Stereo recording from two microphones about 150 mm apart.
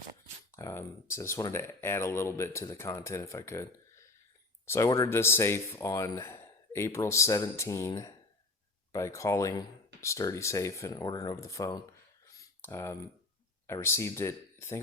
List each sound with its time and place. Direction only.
0.5 s speech: 15° left (ahead or behind)
12.2 s a sound: 20° left (ahead or behind)
13.7 s speech: 15° left (ahead or behind)